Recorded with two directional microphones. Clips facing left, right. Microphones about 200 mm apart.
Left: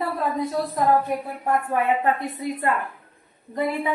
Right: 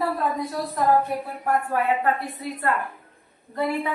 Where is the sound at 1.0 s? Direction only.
20° left (ahead or behind).